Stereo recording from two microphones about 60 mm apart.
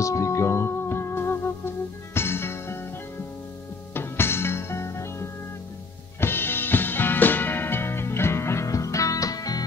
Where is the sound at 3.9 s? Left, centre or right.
Left.